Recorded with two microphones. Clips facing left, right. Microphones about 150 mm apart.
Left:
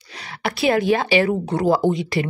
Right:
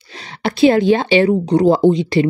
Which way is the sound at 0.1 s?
25° right (ahead or behind).